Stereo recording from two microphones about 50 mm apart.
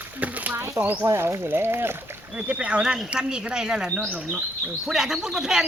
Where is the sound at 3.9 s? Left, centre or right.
Right.